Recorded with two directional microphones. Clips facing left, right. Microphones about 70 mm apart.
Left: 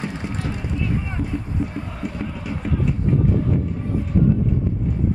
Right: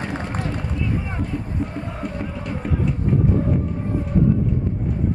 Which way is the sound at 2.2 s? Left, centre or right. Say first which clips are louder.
Even; centre.